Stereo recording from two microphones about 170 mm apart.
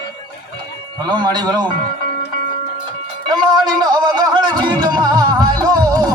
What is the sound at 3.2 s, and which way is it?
Music, 25° right (ahead or behind).